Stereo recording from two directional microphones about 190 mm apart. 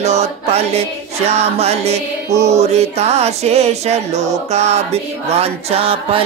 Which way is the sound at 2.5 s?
35° right (ahead or behind).